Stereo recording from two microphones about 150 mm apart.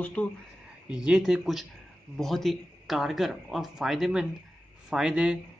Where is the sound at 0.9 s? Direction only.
5° right (ahead or behind).